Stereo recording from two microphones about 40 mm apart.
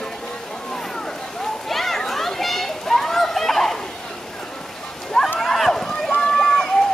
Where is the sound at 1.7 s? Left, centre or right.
Centre.